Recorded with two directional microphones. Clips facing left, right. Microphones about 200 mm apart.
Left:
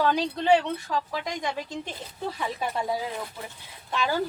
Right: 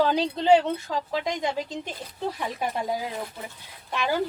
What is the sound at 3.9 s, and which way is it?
Speech, 15° right (ahead or behind).